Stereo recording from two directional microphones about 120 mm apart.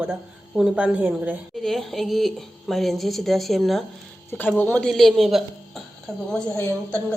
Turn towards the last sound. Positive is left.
turn(degrees=10)  # may be behind; listen again after turning